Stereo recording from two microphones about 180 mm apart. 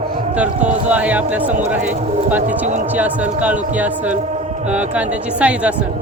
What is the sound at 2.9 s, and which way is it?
Speech, 10° right (ahead or behind).